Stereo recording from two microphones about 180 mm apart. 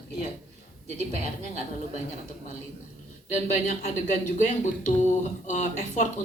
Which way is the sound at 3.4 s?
40° left (ahead or behind).